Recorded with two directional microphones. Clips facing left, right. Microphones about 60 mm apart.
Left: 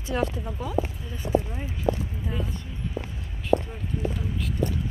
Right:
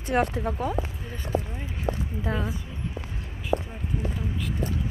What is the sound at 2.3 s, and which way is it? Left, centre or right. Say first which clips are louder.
Speech: right 4 dB; right.